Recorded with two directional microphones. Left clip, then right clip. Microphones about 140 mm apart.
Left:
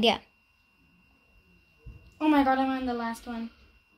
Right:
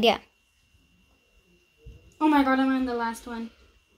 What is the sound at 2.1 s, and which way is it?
A woman's voice, 90° right.